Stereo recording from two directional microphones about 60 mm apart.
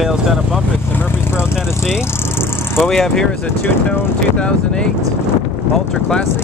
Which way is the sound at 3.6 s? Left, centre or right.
Left.